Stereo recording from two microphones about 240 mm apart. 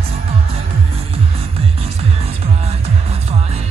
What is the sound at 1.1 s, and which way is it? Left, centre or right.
Music, right.